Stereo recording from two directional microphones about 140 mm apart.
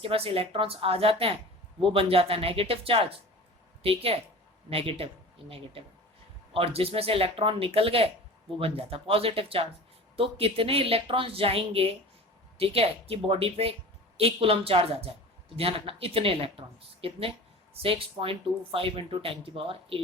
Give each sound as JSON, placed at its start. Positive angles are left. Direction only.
{"t": 0.0, "sound": "a woman's voice", "side_deg": -40}